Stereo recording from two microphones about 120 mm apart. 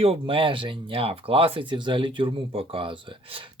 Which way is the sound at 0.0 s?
50° right (ahead or behind).